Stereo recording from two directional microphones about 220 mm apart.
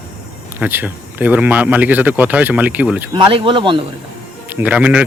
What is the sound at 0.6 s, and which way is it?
Speech, 10° right (ahead or behind).